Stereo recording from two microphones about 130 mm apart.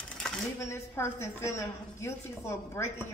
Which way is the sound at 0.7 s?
20° left (ahead or behind).